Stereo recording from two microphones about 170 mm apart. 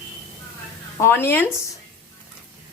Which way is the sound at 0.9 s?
15° left (ahead or behind).